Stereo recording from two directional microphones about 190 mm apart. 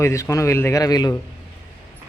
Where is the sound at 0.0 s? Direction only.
15° left (ahead or behind).